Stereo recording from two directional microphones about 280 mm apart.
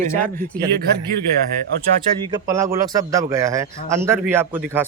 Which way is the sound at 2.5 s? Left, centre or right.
Centre.